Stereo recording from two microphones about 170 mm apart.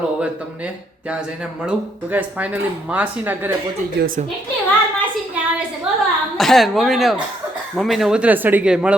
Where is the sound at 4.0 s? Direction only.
80° right.